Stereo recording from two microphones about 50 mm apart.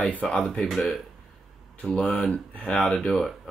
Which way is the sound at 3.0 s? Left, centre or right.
Centre.